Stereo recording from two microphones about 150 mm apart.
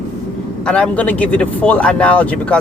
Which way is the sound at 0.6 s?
5° left (ahead or behind).